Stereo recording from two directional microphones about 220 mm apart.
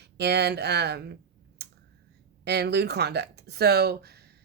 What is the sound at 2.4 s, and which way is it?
Speech, 50° right (ahead or behind).